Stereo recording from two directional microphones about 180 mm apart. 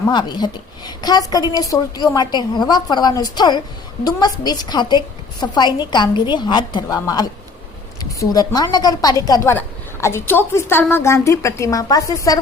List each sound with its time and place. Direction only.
0.1 s a woman's voice: 25° left (ahead or behind)